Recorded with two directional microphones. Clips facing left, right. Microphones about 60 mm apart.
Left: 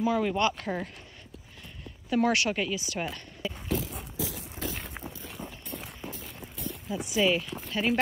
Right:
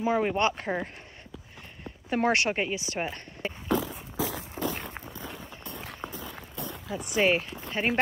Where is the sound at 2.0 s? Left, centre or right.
Right.